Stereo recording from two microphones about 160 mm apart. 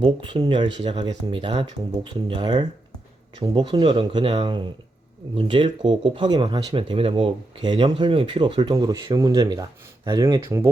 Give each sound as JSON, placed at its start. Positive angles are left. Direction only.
{"t": 0.0, "sound": "speech", "side_deg": -30}
{"t": 0.8, "sound": "speech", "side_deg": -40}